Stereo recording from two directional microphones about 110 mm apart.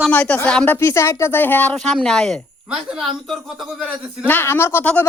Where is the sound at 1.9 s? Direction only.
5° left (ahead or behind).